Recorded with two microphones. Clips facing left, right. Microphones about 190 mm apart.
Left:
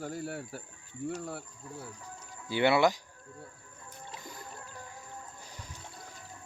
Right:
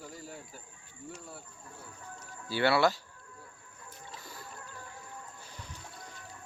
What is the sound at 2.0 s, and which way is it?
Speech, 20° left (ahead or behind).